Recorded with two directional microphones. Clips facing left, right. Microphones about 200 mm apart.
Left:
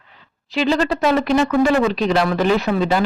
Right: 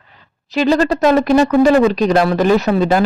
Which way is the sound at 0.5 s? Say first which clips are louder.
Right 4 dB; 45° right (ahead or behind).